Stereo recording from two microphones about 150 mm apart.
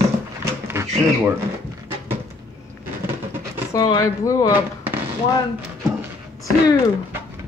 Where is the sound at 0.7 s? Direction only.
15° right (ahead or behind).